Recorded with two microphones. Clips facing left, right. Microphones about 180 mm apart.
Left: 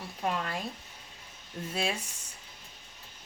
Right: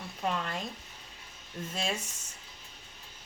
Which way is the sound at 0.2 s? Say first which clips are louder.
Left 1 dB; 5° left (ahead or behind).